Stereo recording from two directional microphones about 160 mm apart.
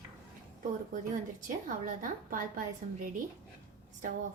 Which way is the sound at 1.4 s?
55° right (ahead or behind).